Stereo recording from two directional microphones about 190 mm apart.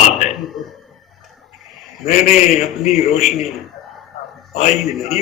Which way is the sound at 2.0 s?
35° left (ahead or behind).